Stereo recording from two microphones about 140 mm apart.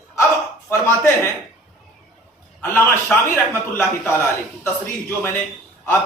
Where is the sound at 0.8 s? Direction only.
15° left (ahead or behind).